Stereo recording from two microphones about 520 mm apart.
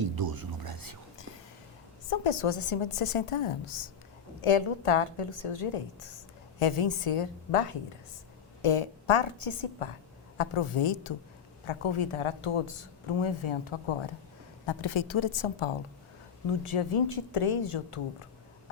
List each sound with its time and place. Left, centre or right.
0.0 s a sound: right
2.0 s a woman's voice: left
6.6 s a woman's voice: left
8.6 s a woman's voice: left
16.7 s a woman's voice: left